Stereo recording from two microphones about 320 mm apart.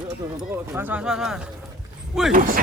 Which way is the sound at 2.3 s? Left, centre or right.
Right.